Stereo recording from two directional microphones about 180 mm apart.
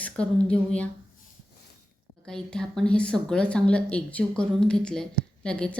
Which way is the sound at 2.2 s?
5° left (ahead or behind).